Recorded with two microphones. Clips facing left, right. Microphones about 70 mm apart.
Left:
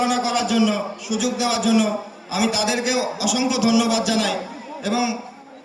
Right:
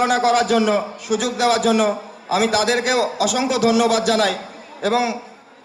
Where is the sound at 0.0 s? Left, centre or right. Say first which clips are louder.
Right 4 dB; right.